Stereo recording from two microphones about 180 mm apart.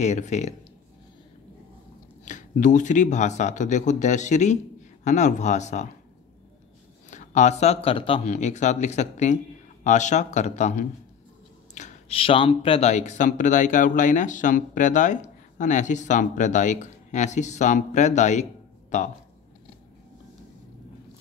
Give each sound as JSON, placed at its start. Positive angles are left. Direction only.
{"t": 0.0, "sound": "speech", "side_deg": 40}
{"t": 2.2, "sound": "speech", "side_deg": 45}
{"t": 7.1, "sound": "speech", "side_deg": 40}